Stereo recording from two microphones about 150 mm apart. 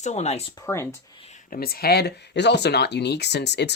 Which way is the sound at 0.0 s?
50° left (ahead or behind).